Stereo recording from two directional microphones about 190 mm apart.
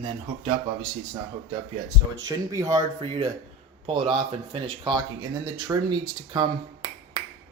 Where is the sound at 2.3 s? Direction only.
15° right (ahead or behind).